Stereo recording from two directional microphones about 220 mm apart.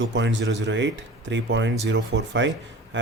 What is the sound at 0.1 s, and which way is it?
Speech, 55° right (ahead or behind).